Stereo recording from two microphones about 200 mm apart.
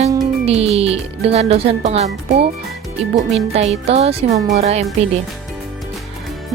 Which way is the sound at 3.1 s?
30° right (ahead or behind).